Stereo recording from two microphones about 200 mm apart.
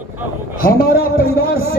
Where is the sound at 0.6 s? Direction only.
50° left (ahead or behind).